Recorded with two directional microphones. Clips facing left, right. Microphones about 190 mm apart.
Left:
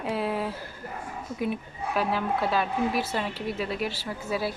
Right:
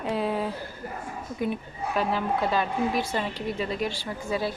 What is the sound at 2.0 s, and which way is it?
Speech, 5° left (ahead or behind).